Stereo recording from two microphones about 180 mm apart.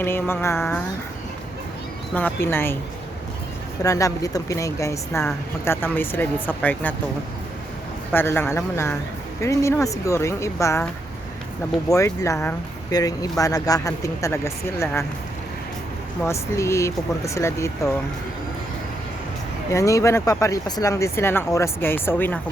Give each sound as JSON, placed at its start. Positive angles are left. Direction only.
{"t": 0.0, "sound": "a woman's voice", "side_deg": 10}
{"t": 2.1, "sound": "a woman's voice", "side_deg": 10}
{"t": 3.8, "sound": "a woman's voice", "side_deg": 20}
{"t": 8.1, "sound": "a woman's voice", "side_deg": 10}
{"t": 11.9, "sound": "a woman's voice", "side_deg": 15}
{"t": 16.2, "sound": "a woman's voice", "side_deg": 15}
{"t": 19.7, "sound": "a woman's voice", "side_deg": 15}